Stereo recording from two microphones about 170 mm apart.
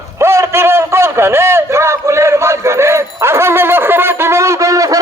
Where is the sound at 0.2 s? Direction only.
15° right (ahead or behind).